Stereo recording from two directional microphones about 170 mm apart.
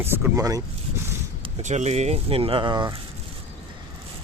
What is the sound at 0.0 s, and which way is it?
Speech, 20° right (ahead or behind).